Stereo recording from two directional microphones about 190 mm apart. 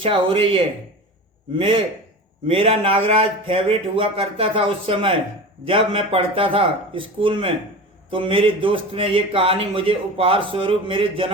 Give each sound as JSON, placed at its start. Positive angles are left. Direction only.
{"t": 0.0, "sound": "a man's voice", "side_deg": -25}